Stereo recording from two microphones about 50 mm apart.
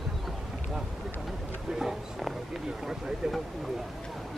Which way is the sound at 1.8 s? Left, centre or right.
Centre.